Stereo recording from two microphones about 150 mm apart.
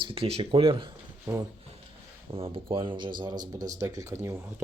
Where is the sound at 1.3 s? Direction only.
20° right (ahead or behind).